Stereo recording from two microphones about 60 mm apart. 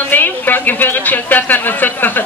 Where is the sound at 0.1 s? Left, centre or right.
Left.